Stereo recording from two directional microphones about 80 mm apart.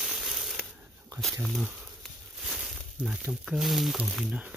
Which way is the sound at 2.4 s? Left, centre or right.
Centre.